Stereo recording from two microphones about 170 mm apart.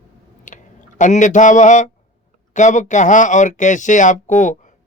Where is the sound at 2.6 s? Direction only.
45° left (ahead or behind).